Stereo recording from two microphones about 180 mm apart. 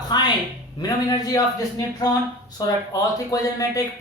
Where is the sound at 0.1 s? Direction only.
25° left (ahead or behind).